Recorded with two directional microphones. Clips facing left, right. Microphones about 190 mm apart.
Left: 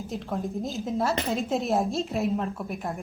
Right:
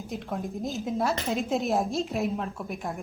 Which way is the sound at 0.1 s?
Centre (ahead or behind).